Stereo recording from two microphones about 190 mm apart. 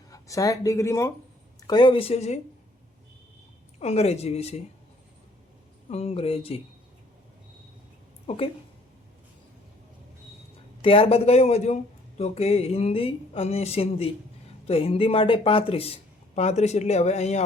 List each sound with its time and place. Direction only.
0.1 s speech: 20° left (ahead or behind); by 2.4 s 35° left (ahead or behind)
3.8 s speech: 35° left (ahead or behind)
5.9 s speech: 30° left (ahead or behind)
10.8 s speech: 30° left (ahead or behind)